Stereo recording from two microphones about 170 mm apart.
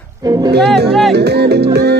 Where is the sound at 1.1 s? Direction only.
75° right (ahead or behind).